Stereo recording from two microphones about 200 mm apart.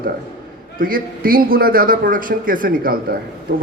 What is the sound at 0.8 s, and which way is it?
A man's voice, 45° right (ahead or behind).